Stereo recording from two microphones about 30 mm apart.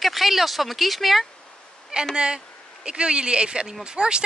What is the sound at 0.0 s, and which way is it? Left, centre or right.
Speech, centre.